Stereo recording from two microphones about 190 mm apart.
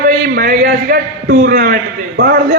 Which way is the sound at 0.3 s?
50° right (ahead or behind).